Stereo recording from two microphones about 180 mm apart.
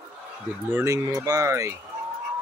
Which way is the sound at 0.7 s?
15° right (ahead or behind).